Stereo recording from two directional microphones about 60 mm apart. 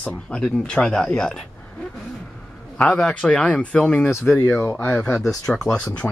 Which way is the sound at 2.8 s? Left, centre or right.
Centre.